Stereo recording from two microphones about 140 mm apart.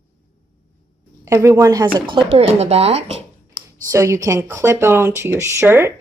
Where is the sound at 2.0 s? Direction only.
35° right (ahead or behind).